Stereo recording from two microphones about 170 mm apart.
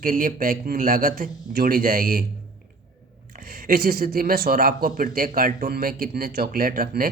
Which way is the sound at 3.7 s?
60° right (ahead or behind).